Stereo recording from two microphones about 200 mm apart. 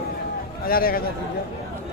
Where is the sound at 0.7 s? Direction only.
45° left (ahead or behind).